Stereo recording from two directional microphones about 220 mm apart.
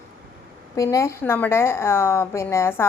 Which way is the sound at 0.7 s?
15° left (ahead or behind).